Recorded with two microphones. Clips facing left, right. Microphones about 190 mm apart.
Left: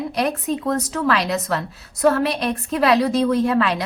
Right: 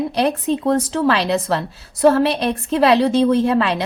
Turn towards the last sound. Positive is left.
turn(degrees=-25)  # may be behind; listen again after turning